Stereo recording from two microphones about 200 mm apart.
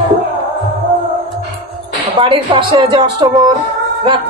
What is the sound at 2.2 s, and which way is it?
Speech, 25° right (ahead or behind).